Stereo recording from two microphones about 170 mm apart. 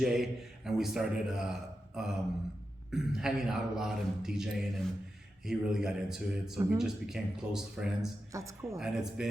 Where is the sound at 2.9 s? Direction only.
5° right (ahead or behind).